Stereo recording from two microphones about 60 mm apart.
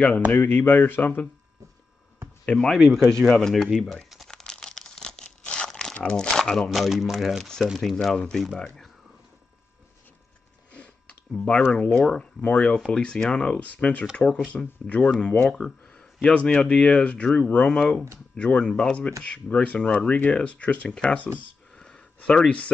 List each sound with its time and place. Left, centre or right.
0.3 s speech: left
2.4 s speech: centre
4.3 s crumpling: centre
5.9 s speech: centre
7.9 s speech: centre
12.0 s speech: centre
15.0 s speech: centre
17.7 s speech: centre
21.7 s a sound: centre